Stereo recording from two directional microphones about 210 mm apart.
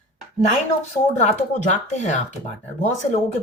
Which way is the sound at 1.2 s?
35° left (ahead or behind).